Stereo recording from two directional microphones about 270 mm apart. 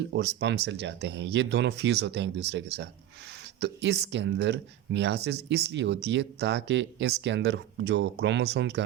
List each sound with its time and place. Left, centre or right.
0.1 s speech: right